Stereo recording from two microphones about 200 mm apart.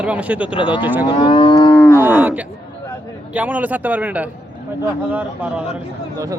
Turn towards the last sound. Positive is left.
turn(degrees=-5)  # may be behind; listen again after turning